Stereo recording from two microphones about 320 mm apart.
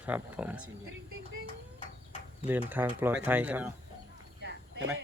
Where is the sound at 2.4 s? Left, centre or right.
Centre.